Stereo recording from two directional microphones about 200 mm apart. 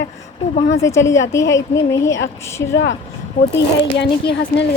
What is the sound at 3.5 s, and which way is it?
Speech, 60° left (ahead or behind).